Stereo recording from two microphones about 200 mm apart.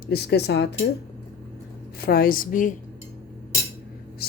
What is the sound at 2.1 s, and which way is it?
Speech, 50° left (ahead or behind).